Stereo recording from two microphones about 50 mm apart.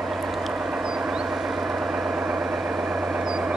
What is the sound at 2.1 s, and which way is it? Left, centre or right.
Vehicle, right.